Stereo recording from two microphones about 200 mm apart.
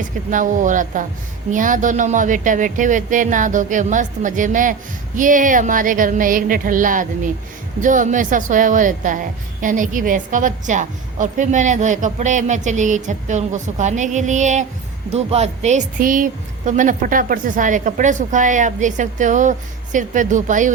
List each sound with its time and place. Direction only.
0.3 s a woman's voice: 40° right (ahead or behind)